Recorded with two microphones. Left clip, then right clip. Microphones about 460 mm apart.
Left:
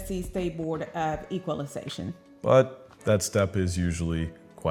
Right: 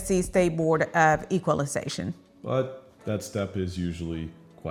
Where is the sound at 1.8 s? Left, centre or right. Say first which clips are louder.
Right 3 dB; right.